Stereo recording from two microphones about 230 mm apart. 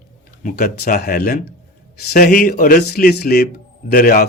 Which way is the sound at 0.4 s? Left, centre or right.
Left.